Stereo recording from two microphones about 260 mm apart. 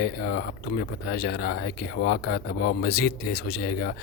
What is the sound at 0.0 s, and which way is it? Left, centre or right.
Speech, left.